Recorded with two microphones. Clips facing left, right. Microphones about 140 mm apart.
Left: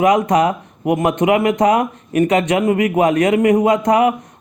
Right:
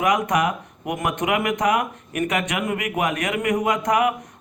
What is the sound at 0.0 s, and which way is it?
A man's voice, 30° left (ahead or behind).